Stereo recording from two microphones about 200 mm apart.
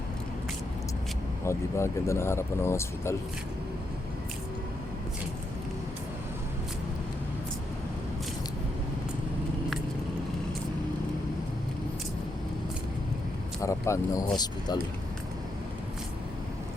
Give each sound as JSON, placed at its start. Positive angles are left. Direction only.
{"t": 1.5, "sound": "speech", "side_deg": 15}
{"t": 13.6, "sound": "speech", "side_deg": 15}